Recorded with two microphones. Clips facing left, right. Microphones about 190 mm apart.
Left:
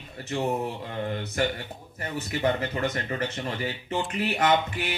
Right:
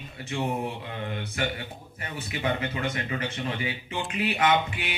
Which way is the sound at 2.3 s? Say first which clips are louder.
Left 2 dB; 40° left (ahead or behind).